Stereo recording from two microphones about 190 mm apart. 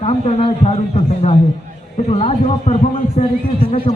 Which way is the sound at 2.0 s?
35° left (ahead or behind).